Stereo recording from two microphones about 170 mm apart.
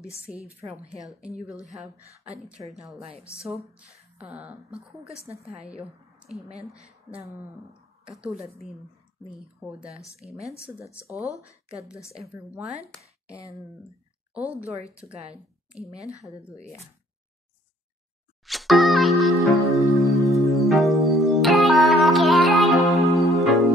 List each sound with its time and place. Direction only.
0.3 s a woman's voice: 5° right (ahead or behind)
3.7 s speech: 5° right (ahead or behind)
5.3 s a woman's voice: 35° right (ahead or behind)
5.8 s a woman's voice: centre (ahead or behind)
8.1 s speech: centre (ahead or behind)
10.2 s a woman's voice: 35° right (ahead or behind)
11.4 s a woman's voice: 5° right (ahead or behind)
14.3 s a woman's voice: 10° right (ahead or behind)
15.0 s a woman's voice: 40° right (ahead or behind)
16.5 s speech: 15° left (ahead or behind)
18.4 s music: centre (ahead or behind)